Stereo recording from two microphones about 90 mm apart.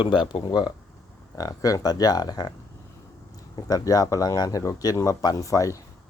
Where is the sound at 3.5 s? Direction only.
45° left (ahead or behind).